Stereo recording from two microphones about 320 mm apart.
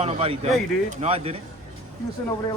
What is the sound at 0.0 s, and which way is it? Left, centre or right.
Speech, centre.